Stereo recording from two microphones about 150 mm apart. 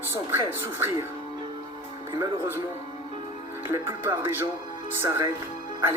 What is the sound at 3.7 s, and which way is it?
Speech, 15° right (ahead or behind).